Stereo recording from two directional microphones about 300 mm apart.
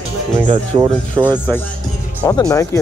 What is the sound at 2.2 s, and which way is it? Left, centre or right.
Speech, centre.